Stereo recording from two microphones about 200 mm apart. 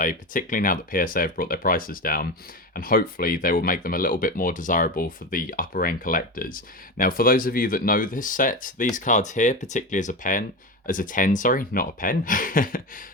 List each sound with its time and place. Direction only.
0.0 s speech: 45° left (ahead or behind)